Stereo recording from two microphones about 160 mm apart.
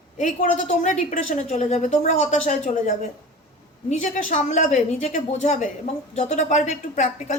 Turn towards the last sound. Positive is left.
turn(degrees=50)  # may be behind; listen again after turning